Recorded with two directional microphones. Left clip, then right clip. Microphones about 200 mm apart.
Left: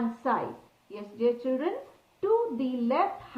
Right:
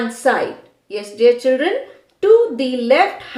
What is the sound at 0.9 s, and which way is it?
A woman's voice, 60° right (ahead or behind).